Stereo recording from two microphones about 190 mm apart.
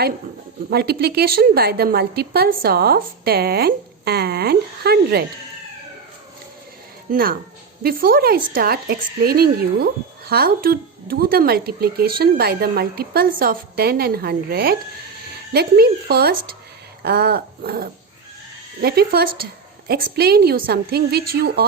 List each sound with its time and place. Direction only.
0.7 s a woman's voice: 55° right (ahead or behind)
7.1 s a woman's voice: 50° right (ahead or behind)
17.0 s dog: 55° right (ahead or behind)
18.8 s a woman's voice: 55° right (ahead or behind)